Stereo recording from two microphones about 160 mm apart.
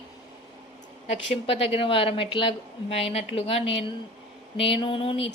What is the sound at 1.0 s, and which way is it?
A woman's voice, 40° left (ahead or behind).